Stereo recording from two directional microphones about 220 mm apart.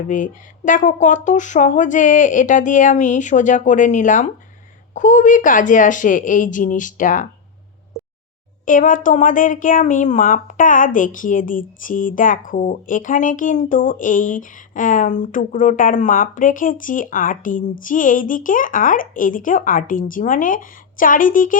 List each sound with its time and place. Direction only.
0.1 s speech: 35° left (ahead or behind)
8.6 s speech: 35° left (ahead or behind)